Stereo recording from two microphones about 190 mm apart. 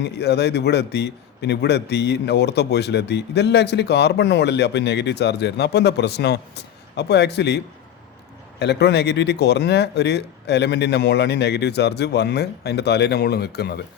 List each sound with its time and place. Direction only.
0.0 s a man's voice: 60° left (ahead or behind)